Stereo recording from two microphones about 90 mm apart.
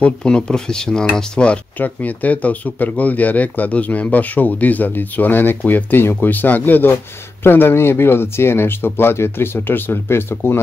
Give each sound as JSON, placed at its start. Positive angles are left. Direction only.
{"t": 0.0, "sound": "speech", "side_deg": 10}